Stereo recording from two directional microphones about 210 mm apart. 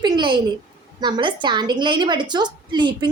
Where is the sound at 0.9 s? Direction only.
20° right (ahead or behind).